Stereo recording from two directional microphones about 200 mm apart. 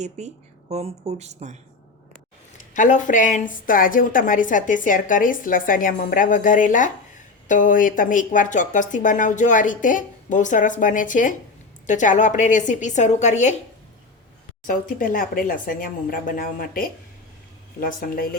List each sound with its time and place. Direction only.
0.2 s speech: 35° right (ahead or behind)
2.6 s a woman's voice: 40° left (ahead or behind)
14.7 s speech: 40° left (ahead or behind)